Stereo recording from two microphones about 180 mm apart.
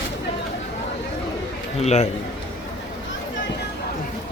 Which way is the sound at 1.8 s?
40° left (ahead or behind).